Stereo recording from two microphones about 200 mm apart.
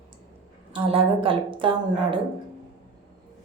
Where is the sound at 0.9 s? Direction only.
25° right (ahead or behind).